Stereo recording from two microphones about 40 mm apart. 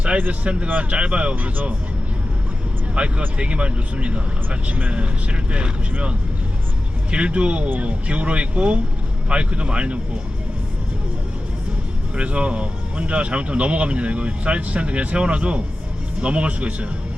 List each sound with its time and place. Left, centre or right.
0.1 s speech: right
1.4 s speech: right
2.9 s speech: right
12.1 s speech: right